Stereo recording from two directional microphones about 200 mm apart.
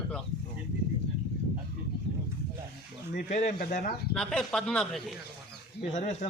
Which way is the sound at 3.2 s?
40° left (ahead or behind).